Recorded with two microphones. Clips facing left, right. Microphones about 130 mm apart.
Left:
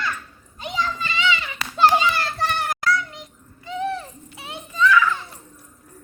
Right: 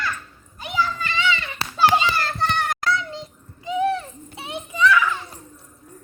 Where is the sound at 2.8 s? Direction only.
25° right (ahead or behind).